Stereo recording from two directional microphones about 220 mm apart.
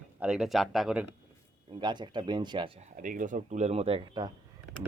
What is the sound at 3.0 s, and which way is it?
Speech, 35° right (ahead or behind).